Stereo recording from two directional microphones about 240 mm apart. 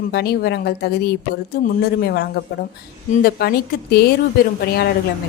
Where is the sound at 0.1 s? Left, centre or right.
Left.